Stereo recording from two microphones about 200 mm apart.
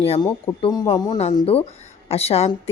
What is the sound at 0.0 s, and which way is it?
A woman's voice, 30° left (ahead or behind).